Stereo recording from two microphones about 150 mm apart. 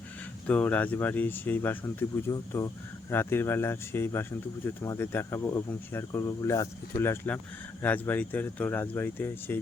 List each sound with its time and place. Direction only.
0.4 s speech: 10° left (ahead or behind)